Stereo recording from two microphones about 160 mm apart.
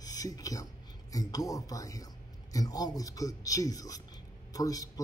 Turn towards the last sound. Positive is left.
turn(degrees=20)  # may be behind; listen again after turning